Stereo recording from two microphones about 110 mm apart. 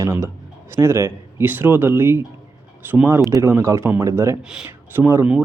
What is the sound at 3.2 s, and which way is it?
Speech, 30° right (ahead or behind).